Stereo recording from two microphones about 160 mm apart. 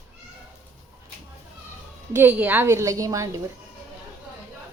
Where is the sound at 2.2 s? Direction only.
10° right (ahead or behind).